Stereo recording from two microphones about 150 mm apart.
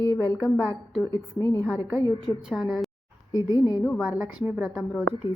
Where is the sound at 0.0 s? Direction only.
15° left (ahead or behind).